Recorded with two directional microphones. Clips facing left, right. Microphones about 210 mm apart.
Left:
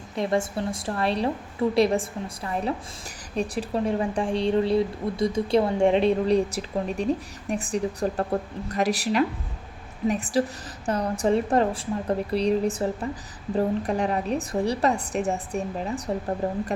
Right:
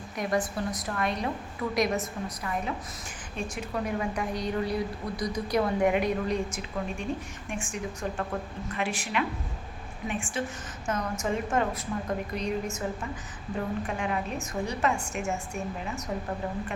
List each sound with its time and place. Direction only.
0.2 s a woman's voice: 25° left (ahead or behind)